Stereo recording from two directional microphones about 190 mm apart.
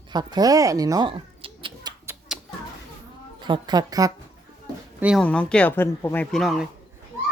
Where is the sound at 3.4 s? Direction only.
25° right (ahead or behind).